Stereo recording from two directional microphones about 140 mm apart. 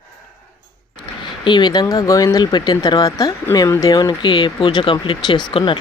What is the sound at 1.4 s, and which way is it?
Speech, 35° left (ahead or behind).